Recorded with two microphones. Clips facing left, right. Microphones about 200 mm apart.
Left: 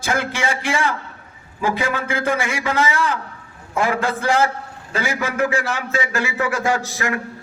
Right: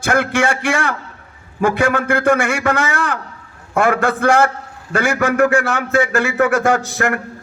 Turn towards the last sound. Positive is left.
turn(degrees=-55)  # may be behind; listen again after turning